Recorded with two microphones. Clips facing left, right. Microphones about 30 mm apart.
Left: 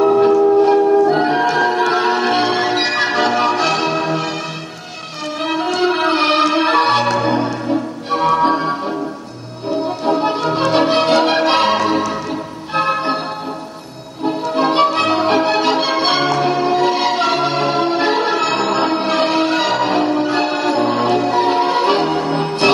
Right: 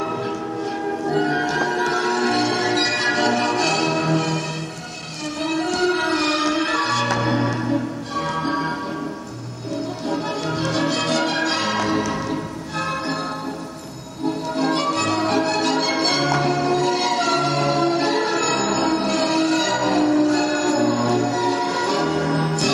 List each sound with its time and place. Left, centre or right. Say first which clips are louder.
0.0 s music: left 14 dB; left; by 4.4 s centre
5.4 s music: left 4 dB; left
8.1 s music: left 11 dB; left
9.7 s change ringing: left 8 dB; left
14.2 s music: left 5 dB; left